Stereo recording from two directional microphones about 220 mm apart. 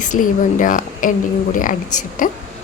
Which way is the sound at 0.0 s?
35° left (ahead or behind).